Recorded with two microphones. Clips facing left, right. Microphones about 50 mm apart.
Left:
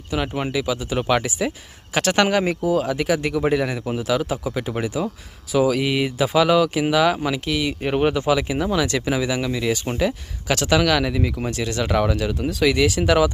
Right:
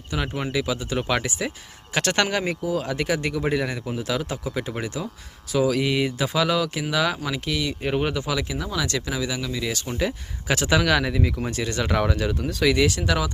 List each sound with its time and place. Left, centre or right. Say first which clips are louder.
0.1 s speech: left 3 dB; centre
10.0 s speech: left 4 dB; centre